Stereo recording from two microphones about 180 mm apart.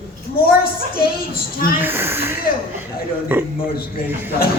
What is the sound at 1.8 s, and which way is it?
Speech, 10° right (ahead or behind).